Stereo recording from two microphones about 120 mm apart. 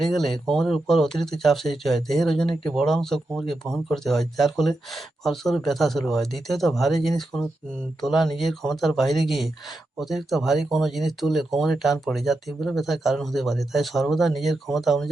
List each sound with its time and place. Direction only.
0.0 s speech: centre (ahead or behind)